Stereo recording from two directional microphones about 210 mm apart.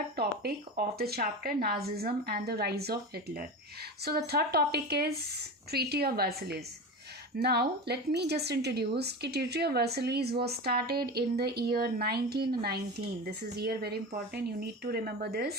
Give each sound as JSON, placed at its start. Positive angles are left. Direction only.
{"t": 0.2, "sound": "speech", "side_deg": -50}